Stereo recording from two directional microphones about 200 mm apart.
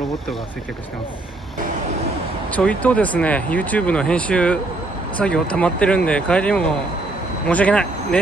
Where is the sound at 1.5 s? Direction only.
40° right (ahead or behind).